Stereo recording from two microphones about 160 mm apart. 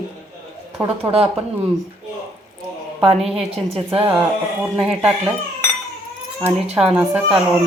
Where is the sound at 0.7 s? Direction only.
15° right (ahead or behind).